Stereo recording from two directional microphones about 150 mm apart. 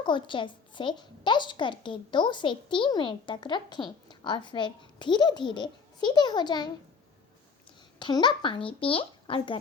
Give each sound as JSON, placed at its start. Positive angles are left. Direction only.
{"t": 0.0, "sound": "a woman's voice", "side_deg": 30}
{"t": 7.9, "sound": "a woman's voice", "side_deg": 30}